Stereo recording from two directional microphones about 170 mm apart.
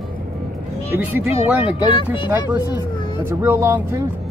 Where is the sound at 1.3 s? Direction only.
35° left (ahead or behind).